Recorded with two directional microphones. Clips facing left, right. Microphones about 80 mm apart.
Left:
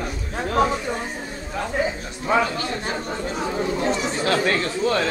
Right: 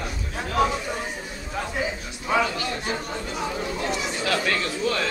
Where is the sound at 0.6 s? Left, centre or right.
Left.